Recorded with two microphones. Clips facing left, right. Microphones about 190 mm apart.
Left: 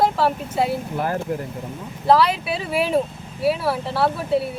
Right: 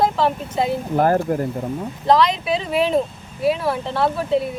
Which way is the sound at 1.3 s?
50° right (ahead or behind).